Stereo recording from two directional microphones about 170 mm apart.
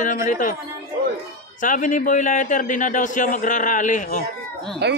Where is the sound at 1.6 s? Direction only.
50° left (ahead or behind).